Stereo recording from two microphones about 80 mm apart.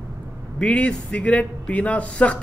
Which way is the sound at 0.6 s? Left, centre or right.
Centre.